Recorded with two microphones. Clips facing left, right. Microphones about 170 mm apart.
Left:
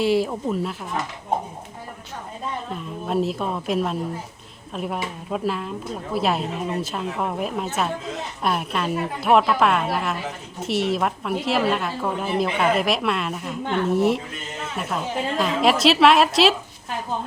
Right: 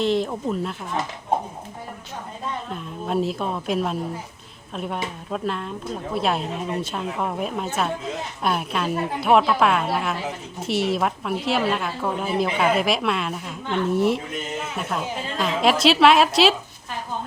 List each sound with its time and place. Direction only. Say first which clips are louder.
0.0 s a woman's voice: left 1 dB; 5° left (ahead or behind)
2.6 s a woman's voice: even; centre (ahead or behind)